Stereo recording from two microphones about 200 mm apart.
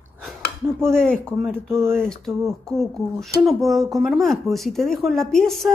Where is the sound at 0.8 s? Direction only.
5° left (ahead or behind).